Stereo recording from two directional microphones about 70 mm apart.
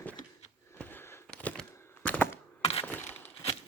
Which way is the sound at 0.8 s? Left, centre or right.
Left.